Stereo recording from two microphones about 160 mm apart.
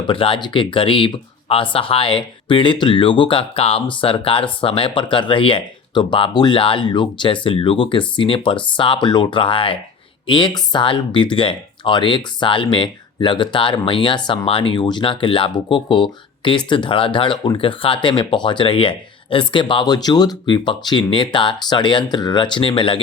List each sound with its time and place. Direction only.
0.1 s speech: 35° left (ahead or behind)